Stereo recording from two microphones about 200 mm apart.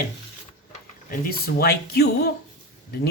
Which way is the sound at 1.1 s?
45° left (ahead or behind).